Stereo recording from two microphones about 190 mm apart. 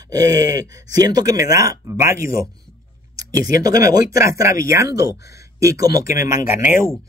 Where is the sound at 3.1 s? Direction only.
20° right (ahead or behind).